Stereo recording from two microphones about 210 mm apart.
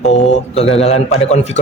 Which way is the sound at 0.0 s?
35° left (ahead or behind).